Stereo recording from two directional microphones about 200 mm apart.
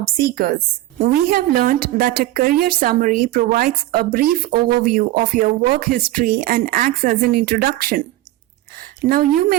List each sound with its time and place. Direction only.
0.9 s a woman's voice: 45° right (ahead or behind)
9.0 s a woman's voice: 45° right (ahead or behind)